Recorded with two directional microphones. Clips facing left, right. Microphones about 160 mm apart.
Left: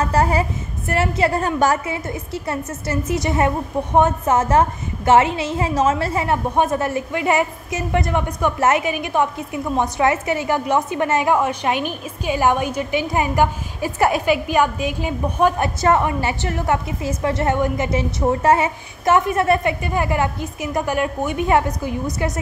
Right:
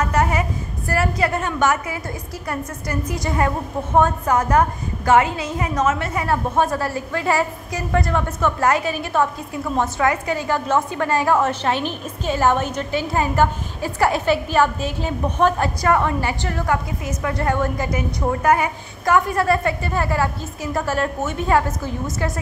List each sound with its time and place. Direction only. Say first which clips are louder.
0.0 s a woman's voice: left 2 dB; 30° left (ahead or behind)